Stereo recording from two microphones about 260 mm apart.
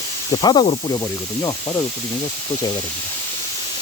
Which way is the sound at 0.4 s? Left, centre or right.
Left.